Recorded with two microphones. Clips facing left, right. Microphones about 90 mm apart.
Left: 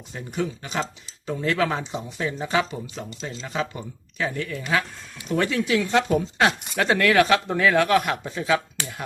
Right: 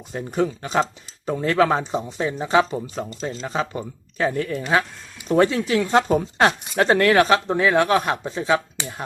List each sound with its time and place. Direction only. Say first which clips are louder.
0.1 s speech: right 5 dB; 40° right (ahead or behind)